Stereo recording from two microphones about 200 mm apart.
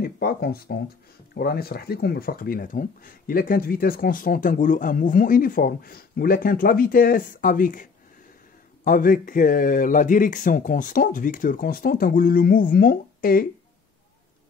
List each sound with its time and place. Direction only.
0.0 s speech: 50° left (ahead or behind)
8.8 s speech: 45° left (ahead or behind)